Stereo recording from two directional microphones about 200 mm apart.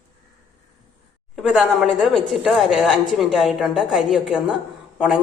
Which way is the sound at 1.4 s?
Centre (ahead or behind).